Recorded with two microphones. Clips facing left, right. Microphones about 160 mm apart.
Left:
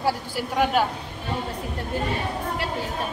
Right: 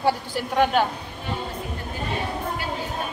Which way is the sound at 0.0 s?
5° left (ahead or behind).